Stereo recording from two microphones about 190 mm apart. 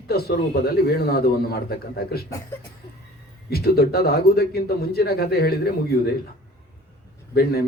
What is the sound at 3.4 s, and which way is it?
A man's voice, 55° left (ahead or behind).